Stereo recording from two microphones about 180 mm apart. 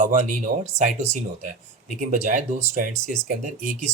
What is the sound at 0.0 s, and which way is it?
Speech, 45° right (ahead or behind).